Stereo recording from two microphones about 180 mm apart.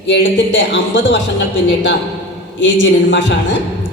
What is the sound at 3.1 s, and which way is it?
Speech, 85° left.